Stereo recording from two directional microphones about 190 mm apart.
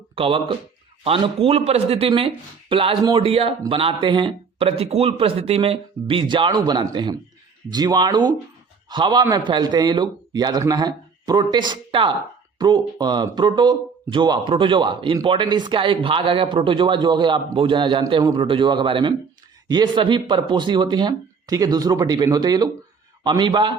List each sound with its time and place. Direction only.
0.2 s speech: 30° right (ahead or behind)